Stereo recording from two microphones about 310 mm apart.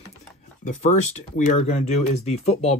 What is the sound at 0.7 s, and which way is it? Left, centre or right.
Speech, left.